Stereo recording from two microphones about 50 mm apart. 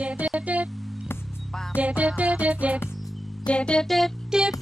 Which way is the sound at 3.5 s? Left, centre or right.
Left.